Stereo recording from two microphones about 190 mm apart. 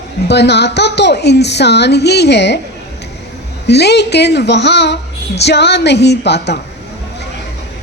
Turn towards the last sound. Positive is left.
turn(degrees=60)  # may be behind; listen again after turning